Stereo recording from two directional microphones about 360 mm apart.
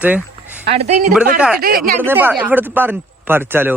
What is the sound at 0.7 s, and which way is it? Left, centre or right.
Speech, centre.